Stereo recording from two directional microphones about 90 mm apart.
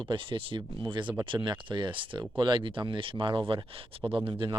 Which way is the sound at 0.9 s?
60° right (ahead or behind).